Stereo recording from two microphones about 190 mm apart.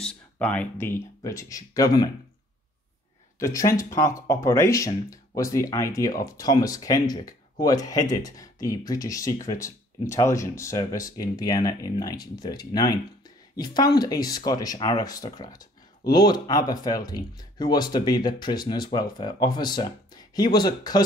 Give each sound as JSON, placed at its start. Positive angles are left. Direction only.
{"t": 0.0, "sound": "speech", "side_deg": 5}
{"t": 3.3, "sound": "speech", "side_deg": 15}